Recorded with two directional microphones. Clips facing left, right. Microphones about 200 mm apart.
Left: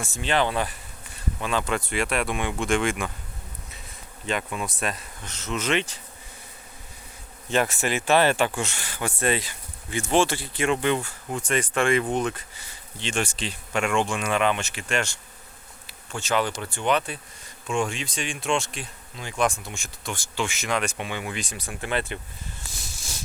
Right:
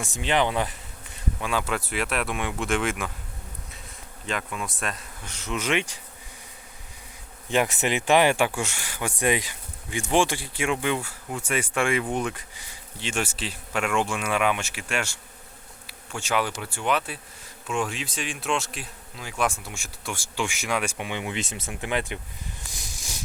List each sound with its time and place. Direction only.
0.0 s speech: 15° right (ahead or behind)
1.4 s speech: 10° right (ahead or behind)
4.3 s speech: centre (ahead or behind)
5.2 s speech: 10° right (ahead or behind)
7.5 s speech: 15° right (ahead or behind)
15.9 s bee: 10° right (ahead or behind)
16.6 s speech: 10° right (ahead or behind)
22.6 s a sound: 15° right (ahead or behind)